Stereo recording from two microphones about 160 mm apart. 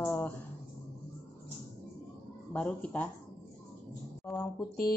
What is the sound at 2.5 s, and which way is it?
Speech, 5° left (ahead or behind).